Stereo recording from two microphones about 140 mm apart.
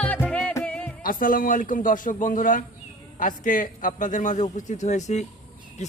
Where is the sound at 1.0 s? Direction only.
85° left.